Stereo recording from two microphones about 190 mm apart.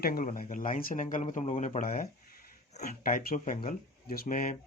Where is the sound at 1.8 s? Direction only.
45° left (ahead or behind).